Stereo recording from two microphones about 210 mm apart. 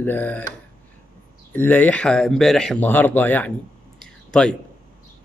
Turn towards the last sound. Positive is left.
turn(degrees=5)  # may be behind; listen again after turning